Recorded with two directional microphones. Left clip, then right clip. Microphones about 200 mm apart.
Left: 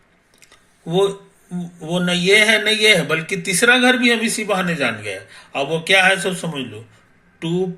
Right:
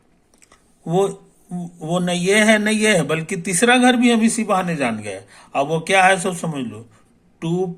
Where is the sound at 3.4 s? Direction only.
35° right (ahead or behind).